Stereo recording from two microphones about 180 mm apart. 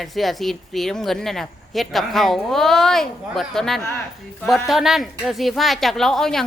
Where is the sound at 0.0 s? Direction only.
Centre (ahead or behind).